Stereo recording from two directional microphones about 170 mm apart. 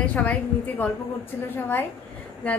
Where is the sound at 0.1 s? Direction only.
10° left (ahead or behind).